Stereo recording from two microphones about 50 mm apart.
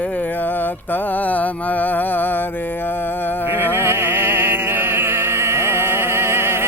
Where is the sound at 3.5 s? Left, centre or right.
Right.